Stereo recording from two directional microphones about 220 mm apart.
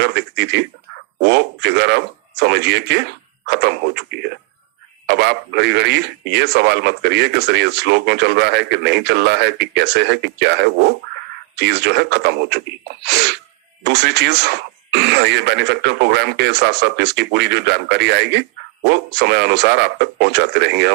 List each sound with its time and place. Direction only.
0.0 s speech: 50° right (ahead or behind)